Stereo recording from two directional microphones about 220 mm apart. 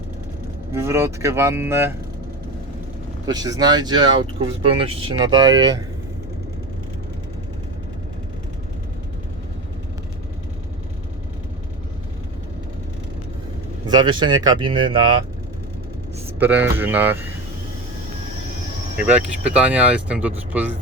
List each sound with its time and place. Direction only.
0.7 s speech: 10° right (ahead or behind)
3.2 s speech: 15° right (ahead or behind)
13.8 s speech: 20° right (ahead or behind)
16.4 s speech: 10° right (ahead or behind)
18.9 s speech: 5° right (ahead or behind)